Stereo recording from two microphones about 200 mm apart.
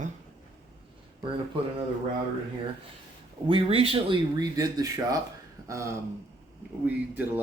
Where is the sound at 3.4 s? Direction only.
25° right (ahead or behind).